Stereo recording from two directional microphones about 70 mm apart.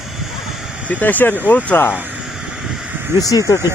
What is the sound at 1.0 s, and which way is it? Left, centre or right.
Speech, left.